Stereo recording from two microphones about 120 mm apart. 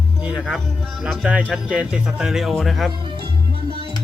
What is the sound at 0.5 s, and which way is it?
Speech, centre (ahead or behind).